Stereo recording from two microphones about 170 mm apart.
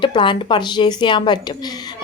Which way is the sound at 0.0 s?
30° left (ahead or behind).